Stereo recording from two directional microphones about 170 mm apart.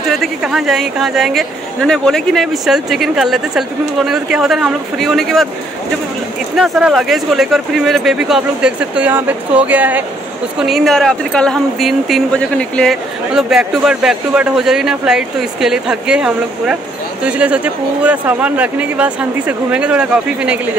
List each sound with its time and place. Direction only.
0.1 s speech: centre (ahead or behind)
6.5 s speech: 5° right (ahead or behind)